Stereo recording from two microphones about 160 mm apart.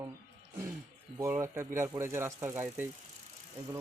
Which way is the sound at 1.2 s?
15° right (ahead or behind).